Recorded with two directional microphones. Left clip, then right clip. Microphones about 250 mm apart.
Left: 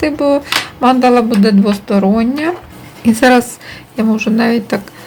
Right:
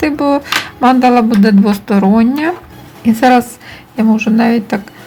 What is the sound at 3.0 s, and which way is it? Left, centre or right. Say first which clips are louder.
A woman's voice: even; centre.